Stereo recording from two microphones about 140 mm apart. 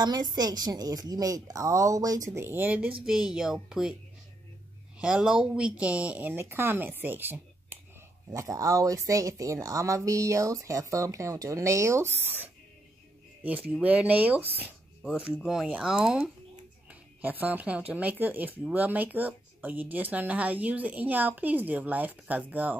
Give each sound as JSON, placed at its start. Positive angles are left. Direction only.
{"t": 0.0, "sound": "speech", "side_deg": -30}
{"t": 4.9, "sound": "speech", "side_deg": -5}
{"t": 8.3, "sound": "speech", "side_deg": -25}
{"t": 13.7, "sound": "speech", "side_deg": -10}